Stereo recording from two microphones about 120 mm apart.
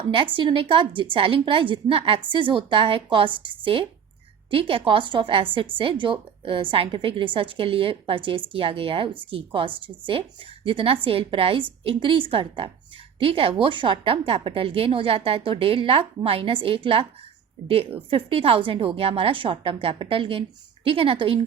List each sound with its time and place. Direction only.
0.3 s a woman's voice: 45° right (ahead or behind)